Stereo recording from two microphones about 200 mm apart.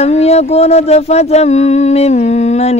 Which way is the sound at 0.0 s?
35° left (ahead or behind).